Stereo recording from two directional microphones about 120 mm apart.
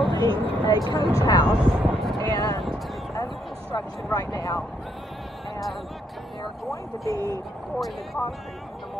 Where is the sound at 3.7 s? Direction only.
35° left (ahead or behind).